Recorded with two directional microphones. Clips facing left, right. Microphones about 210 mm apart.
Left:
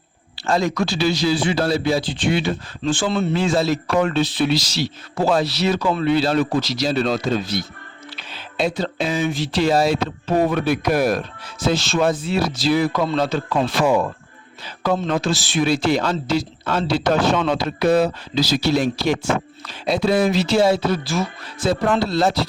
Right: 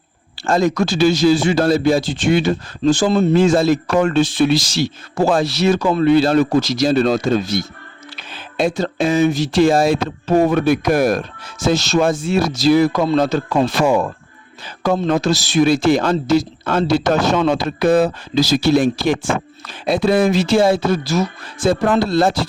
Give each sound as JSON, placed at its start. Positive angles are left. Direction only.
{"t": 0.3, "sound": "a man's voice", "side_deg": -45}